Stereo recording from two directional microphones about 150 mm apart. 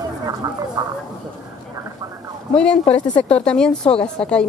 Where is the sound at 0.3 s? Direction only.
25° right (ahead or behind).